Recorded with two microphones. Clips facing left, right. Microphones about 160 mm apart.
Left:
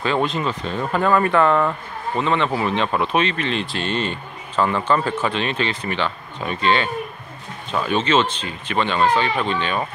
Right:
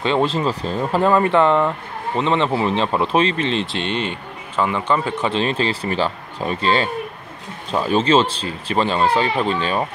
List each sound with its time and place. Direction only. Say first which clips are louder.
0.0 s speech: right 3 dB; 30° right (ahead or behind)
5.3 s speech: right 3 dB; 35° right (ahead or behind)